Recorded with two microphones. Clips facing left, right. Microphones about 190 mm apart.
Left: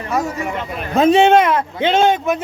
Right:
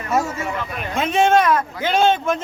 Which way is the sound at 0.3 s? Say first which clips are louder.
Left 2 dB; 20° left (ahead or behind).